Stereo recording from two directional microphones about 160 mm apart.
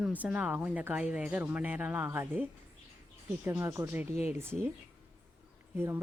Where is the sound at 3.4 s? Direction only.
15° right (ahead or behind).